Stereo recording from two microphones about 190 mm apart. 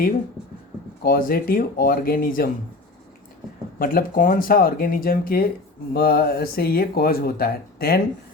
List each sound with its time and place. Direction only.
1.0 s speech: 50° left (ahead or behind)
3.8 s speech: 50° left (ahead or behind)